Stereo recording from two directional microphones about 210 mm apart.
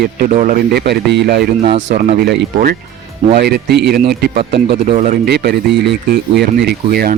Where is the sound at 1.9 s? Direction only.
45° right (ahead or behind).